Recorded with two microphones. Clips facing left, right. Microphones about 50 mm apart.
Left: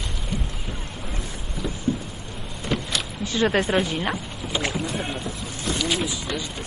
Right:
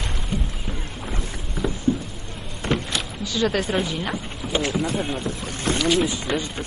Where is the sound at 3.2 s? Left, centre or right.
Left.